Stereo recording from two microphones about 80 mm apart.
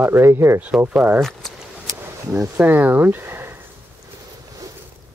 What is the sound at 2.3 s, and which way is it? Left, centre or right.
Speech, right.